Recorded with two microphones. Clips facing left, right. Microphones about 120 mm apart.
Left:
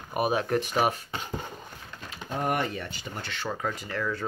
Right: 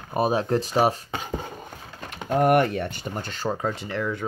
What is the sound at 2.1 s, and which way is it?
Speech, 65° right (ahead or behind).